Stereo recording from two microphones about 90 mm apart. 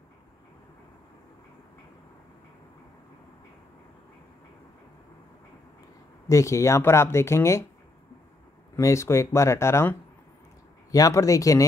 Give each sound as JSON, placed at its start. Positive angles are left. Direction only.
{"t": 6.2, "sound": "speech", "side_deg": 35}
{"t": 8.7, "sound": "speech", "side_deg": 35}
{"t": 10.9, "sound": "speech", "side_deg": 40}